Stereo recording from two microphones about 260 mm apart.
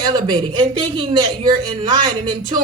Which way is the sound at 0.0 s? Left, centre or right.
Centre.